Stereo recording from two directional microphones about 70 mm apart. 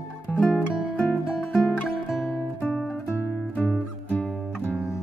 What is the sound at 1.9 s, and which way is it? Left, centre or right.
Music, centre.